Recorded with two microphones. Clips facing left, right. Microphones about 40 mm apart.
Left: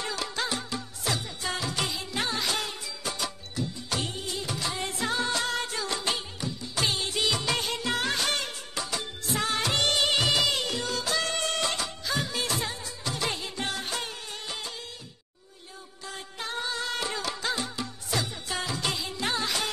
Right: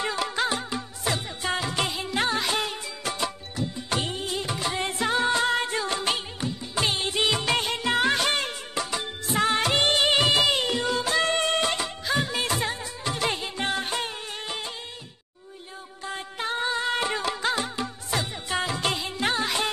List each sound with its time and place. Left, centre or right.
0.0 s music: right
2.1 s music of bollywood: right
16.1 s music: right